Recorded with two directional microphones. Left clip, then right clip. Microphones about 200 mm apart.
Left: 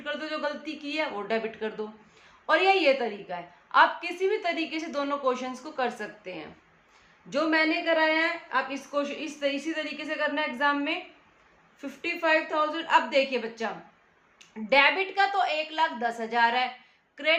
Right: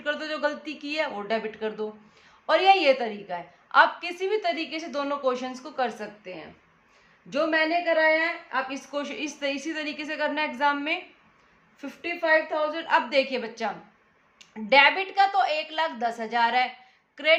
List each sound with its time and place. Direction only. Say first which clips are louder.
0.0 s a woman's voice: right 4 dB; 20° right (ahead or behind)
8.9 s a woman's voice: left 1 dB; 20° right (ahead or behind)
11.8 s a woman's voice: even; 10° right (ahead or behind)